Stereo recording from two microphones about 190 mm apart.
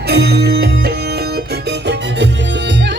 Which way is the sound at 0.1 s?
55° right (ahead or behind).